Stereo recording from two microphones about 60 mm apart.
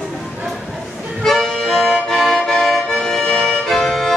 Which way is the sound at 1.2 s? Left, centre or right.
Centre.